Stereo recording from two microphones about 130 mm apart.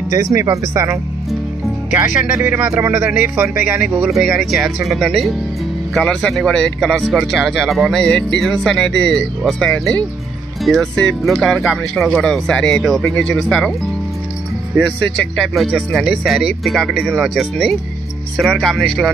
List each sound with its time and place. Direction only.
0.1 s speech: 25° right (ahead or behind)
1.9 s speech: 10° right (ahead or behind)
3.7 s speech: 5° right (ahead or behind)
15.5 s speech: centre (ahead or behind)